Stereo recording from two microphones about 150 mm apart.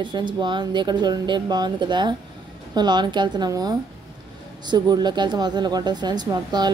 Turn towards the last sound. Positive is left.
turn(degrees=-30)  # may be behind; listen again after turning